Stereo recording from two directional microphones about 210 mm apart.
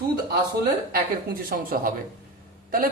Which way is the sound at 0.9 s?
45° right (ahead or behind).